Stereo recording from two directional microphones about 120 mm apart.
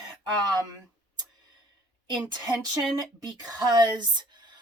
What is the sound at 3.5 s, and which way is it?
Speech, 35° right (ahead or behind).